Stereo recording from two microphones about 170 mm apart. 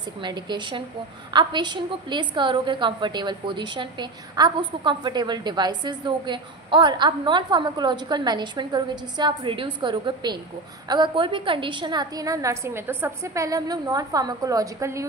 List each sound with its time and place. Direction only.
0.2 s a woman's voice: 25° right (ahead or behind)